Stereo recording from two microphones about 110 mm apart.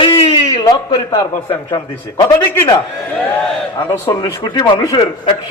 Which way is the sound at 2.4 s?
25° left (ahead or behind).